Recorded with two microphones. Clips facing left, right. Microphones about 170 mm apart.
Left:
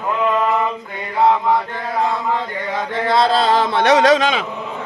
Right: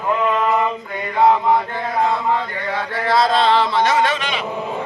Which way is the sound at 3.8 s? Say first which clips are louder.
Left 5 dB; 85° left.